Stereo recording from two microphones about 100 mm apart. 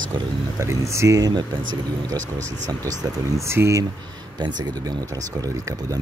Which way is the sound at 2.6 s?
35° right (ahead or behind).